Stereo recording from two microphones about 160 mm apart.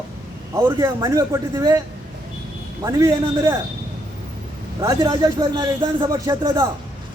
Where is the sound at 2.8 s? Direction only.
20° right (ahead or behind).